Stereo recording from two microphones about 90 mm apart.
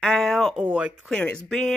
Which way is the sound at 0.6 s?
15° right (ahead or behind).